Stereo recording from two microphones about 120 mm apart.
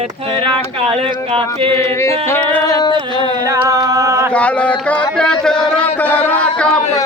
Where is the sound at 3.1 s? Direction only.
45° left (ahead or behind).